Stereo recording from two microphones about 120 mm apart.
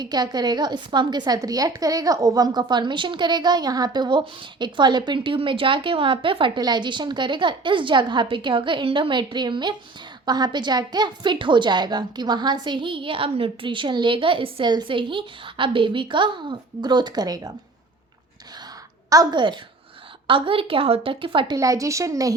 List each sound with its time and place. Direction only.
0.0 s a woman's voice: 35° right (ahead or behind)
19.1 s a woman's voice: 35° right (ahead or behind)
21.5 s speech: 30° right (ahead or behind)